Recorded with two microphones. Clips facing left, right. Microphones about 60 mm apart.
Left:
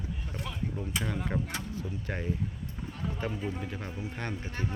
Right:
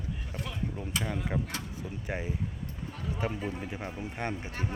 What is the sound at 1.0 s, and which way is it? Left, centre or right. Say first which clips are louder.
Speech: even; centre.